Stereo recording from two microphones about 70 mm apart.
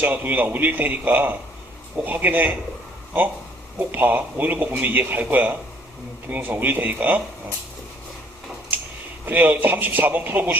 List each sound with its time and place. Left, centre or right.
0.0 s a man's voice: right
3.8 s a man's voice: right
9.2 s a man's voice: right